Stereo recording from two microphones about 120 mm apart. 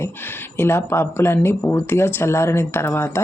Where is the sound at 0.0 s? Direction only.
20° left (ahead or behind).